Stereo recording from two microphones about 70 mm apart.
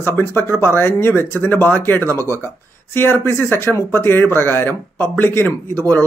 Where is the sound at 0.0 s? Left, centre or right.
Left.